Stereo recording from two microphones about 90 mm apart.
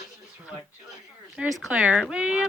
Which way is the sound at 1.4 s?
10° right (ahead or behind).